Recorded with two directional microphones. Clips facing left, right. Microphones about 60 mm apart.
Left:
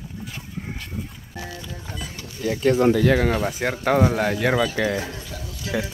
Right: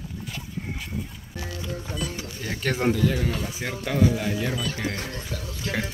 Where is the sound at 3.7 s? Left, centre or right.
Left.